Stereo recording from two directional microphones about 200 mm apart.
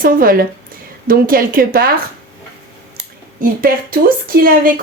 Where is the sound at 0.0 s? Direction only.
45° right (ahead or behind).